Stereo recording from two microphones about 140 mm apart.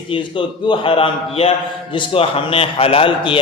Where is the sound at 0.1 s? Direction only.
40° left (ahead or behind).